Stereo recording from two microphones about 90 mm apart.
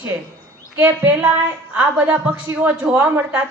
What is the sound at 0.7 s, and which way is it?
Speech, 25° right (ahead or behind).